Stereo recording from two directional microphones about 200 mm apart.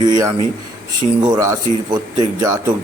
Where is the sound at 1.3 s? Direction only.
15° right (ahead or behind).